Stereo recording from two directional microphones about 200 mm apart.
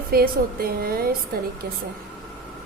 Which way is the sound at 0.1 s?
50° right (ahead or behind).